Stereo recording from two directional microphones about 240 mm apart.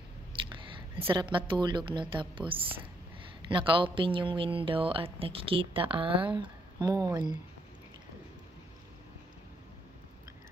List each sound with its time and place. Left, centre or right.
0.4 s chewing: right
1.0 s speech: centre